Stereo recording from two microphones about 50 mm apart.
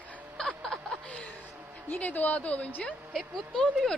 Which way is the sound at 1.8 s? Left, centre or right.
Left.